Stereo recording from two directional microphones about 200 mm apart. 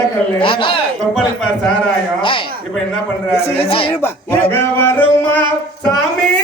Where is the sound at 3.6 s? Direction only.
25° left (ahead or behind).